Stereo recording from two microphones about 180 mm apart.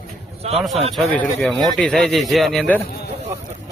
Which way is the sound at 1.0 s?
Centre (ahead or behind).